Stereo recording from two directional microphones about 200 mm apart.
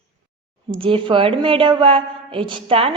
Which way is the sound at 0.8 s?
25° right (ahead or behind).